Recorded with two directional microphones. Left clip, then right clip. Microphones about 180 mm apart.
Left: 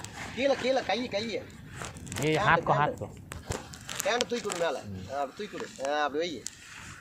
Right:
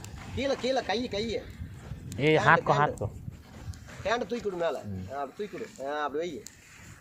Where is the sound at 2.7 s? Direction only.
40° right (ahead or behind).